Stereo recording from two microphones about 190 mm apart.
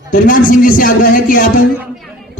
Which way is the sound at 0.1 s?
45° left (ahead or behind).